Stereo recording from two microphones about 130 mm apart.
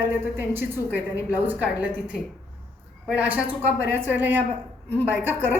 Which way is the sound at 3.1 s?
10° right (ahead or behind).